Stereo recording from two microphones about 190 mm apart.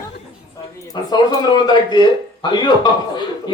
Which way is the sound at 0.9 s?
20° left (ahead or behind).